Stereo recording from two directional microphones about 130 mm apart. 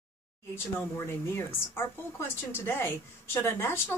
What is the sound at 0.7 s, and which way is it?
Speech, 20° left (ahead or behind).